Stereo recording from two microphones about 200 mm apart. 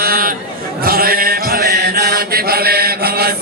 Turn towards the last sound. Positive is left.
turn(degrees=-50)  # may be behind; listen again after turning